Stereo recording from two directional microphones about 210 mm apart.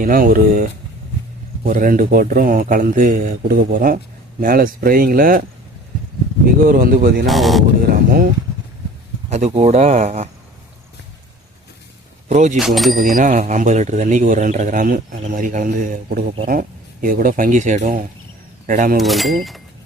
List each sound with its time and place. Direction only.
0.0 s speech: 45° right (ahead or behind)
6.7 s speech: 45° right (ahead or behind)
7.3 s speech: centre (ahead or behind)
7.8 s a sound: 45° right (ahead or behind)
9.3 s speech: 30° right (ahead or behind)
12.3 s speech: 35° right (ahead or behind)
12.5 s speech: centre (ahead or behind)
13.0 s speech: 40° right (ahead or behind)
18.9 s speech: centre (ahead or behind)